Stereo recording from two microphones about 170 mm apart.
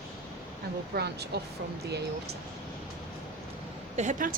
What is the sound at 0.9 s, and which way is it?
Speech, 70° right (ahead or behind).